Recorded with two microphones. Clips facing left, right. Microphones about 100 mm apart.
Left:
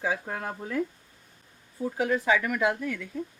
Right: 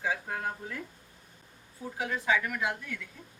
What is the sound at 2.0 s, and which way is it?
Speech, 50° left (ahead or behind).